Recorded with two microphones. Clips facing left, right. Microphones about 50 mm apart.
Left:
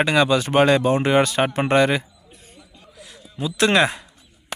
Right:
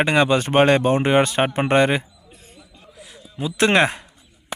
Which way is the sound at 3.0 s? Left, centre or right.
Centre.